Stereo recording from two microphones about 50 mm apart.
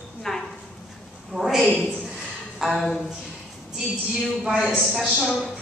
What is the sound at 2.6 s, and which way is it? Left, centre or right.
Speech, centre.